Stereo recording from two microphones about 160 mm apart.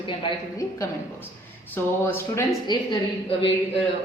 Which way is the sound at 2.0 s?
15° left (ahead or behind).